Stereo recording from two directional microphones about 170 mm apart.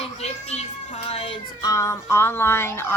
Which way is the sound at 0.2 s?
40° left (ahead or behind).